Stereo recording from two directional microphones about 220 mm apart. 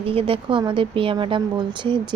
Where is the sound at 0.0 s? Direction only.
25° right (ahead or behind).